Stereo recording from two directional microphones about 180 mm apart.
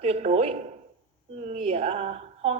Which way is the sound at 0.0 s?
35° right (ahead or behind).